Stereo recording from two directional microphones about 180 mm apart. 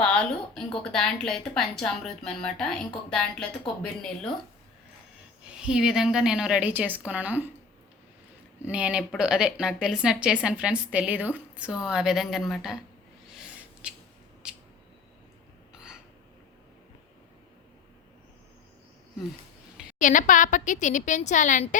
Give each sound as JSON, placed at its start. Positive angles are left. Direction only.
{"t": 0.0, "sound": "speech", "side_deg": 5}
{"t": 5.6, "sound": "speech", "side_deg": -5}
{"t": 8.6, "sound": "speech", "side_deg": -5}
{"t": 13.3, "sound": "a sound", "side_deg": -5}
{"t": 20.0, "sound": "a woman's voice", "side_deg": 45}